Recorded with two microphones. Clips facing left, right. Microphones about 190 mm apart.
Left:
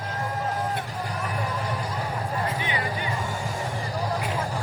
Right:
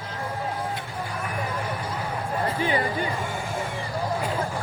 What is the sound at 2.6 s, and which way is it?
Music, 35° right (ahead or behind).